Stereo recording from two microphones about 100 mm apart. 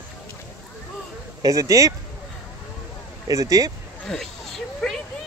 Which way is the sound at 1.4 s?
35° right (ahead or behind).